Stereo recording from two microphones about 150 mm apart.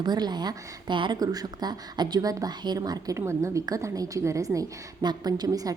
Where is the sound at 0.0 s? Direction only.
30° right (ahead or behind).